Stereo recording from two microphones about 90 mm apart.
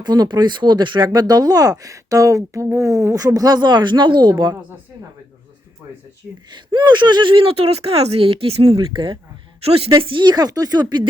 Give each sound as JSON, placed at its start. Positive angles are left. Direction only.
{"t": 0.0, "sound": "speech", "side_deg": -50}
{"t": 6.5, "sound": "speech", "side_deg": -55}
{"t": 8.8, "sound": "speech", "side_deg": -65}
{"t": 9.6, "sound": "speech", "side_deg": -90}
{"t": 10.0, "sound": "speech", "side_deg": -75}
{"t": 10.2, "sound": "speech", "side_deg": -45}